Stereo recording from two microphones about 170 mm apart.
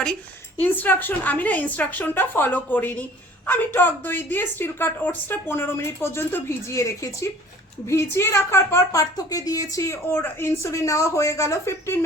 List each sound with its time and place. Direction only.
0.6 s a woman's voice: 10° left (ahead or behind)